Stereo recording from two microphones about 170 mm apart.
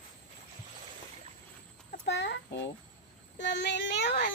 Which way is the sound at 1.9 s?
90° left.